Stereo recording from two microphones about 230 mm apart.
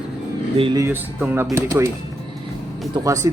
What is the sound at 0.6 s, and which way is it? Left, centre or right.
A man's voice, centre.